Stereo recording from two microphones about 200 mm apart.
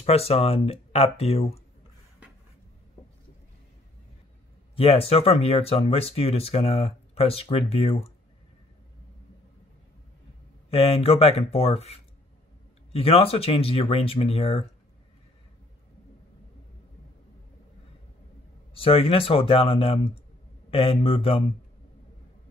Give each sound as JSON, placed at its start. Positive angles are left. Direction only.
{"t": 0.0, "sound": "speech", "side_deg": 30}
{"t": 4.7, "sound": "speech", "side_deg": 30}
{"t": 10.7, "sound": "speech", "side_deg": 30}
{"t": 18.8, "sound": "speech", "side_deg": 30}